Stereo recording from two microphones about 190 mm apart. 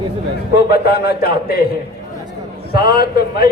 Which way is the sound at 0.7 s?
55° left (ahead or behind).